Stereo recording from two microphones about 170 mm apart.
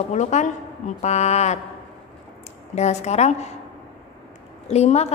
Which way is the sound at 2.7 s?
40° left (ahead or behind).